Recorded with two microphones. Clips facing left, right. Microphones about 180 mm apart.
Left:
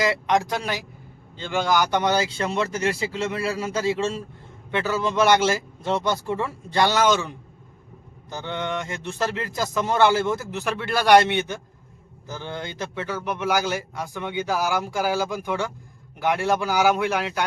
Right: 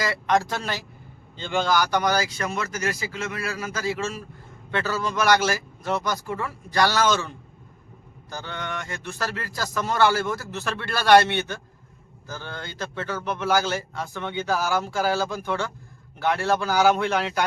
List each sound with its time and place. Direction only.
0.0 s a man's voice: 20° left (ahead or behind); by 1.6 s 5° left (ahead or behind)
1.6 s speech: 20° left (ahead or behind)